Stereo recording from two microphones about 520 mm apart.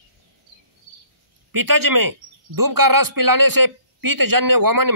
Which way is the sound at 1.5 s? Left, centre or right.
Right.